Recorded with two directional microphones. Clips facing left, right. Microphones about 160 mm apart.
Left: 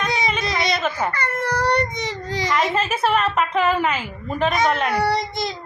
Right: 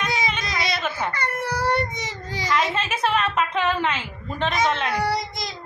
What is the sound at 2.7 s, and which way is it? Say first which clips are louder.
A woman's voice: left 3 dB; 10° left (ahead or behind).